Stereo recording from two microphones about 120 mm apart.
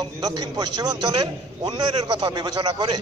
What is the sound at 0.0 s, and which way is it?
A man's voice, 35° right (ahead or behind).